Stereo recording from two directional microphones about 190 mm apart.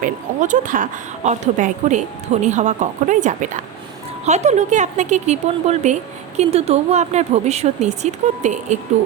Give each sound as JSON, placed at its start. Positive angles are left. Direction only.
{"t": 0.0, "sound": "speech", "side_deg": -45}